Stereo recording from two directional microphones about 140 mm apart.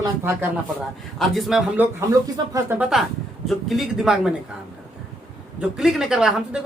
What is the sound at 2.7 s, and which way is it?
Speech, 5° right (ahead or behind).